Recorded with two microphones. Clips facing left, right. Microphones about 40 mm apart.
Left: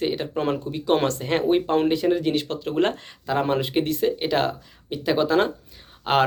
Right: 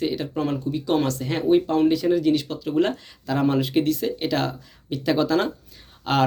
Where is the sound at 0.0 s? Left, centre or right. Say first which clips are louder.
Even; left.